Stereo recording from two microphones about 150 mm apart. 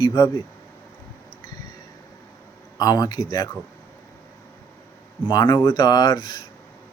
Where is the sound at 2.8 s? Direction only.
25° left (ahead or behind).